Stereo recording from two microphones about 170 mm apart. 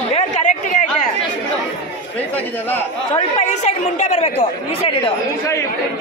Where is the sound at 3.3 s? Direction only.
45° left (ahead or behind).